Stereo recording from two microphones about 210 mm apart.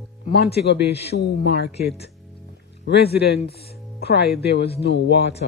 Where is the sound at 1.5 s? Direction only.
50° left (ahead or behind).